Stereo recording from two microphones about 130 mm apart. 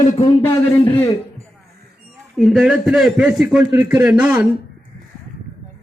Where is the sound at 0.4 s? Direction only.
15° left (ahead or behind).